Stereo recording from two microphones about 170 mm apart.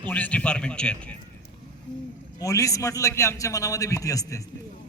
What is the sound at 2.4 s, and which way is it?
A man's voice, 20° left (ahead or behind).